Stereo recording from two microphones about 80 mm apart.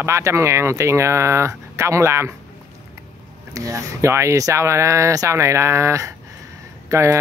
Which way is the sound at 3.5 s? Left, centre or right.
Right.